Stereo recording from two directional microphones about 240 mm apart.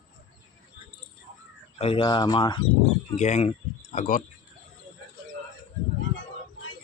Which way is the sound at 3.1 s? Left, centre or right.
Left.